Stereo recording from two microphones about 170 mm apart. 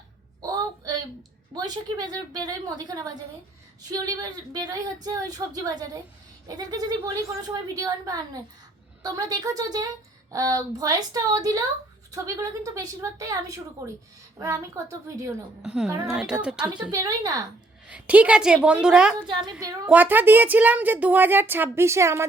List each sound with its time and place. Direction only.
1.5 s a woman's voice: 25° right (ahead or behind)
15.6 s a woman's voice: 5° right (ahead or behind)
16.9 s a woman's voice: 20° right (ahead or behind)
17.8 s a woman's voice: 10° right (ahead or behind)
19.4 s a woman's voice: 20° right (ahead or behind)
19.9 s a woman's voice: 10° right (ahead or behind)